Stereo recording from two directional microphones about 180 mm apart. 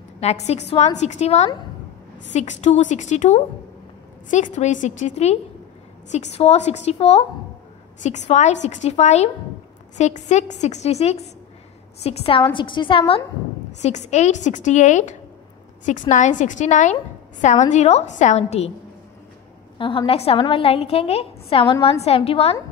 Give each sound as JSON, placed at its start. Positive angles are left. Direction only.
{"t": 0.2, "sound": "a woman's voice", "side_deg": 35}
{"t": 2.6, "sound": "a woman's voice", "side_deg": 40}
{"t": 19.8, "sound": "a woman's voice", "side_deg": 30}